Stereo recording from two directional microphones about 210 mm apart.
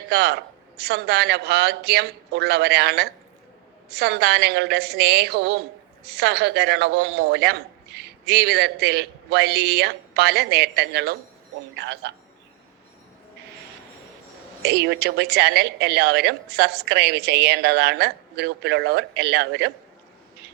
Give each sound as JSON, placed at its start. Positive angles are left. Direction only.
{"t": 0.1, "sound": "a man's voice", "side_deg": -50}
{"t": 14.6, "sound": "a woman's voice", "side_deg": -55}